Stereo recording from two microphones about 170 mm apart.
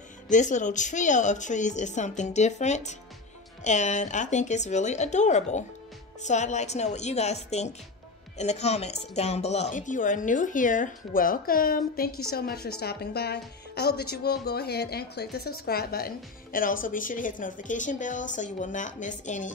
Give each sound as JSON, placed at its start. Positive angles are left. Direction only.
{"t": 0.3, "sound": "a woman's voice", "side_deg": 45}
{"t": 16.5, "sound": "speech", "side_deg": 55}